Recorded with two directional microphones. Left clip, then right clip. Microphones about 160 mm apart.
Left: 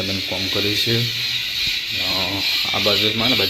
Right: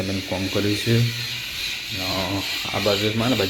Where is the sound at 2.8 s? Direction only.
5° right (ahead or behind).